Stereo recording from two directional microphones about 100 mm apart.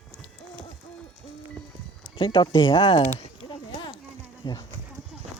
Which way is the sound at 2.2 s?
55° left (ahead or behind).